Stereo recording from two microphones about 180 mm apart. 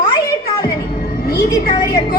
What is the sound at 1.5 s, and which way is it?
Music, 25° left (ahead or behind).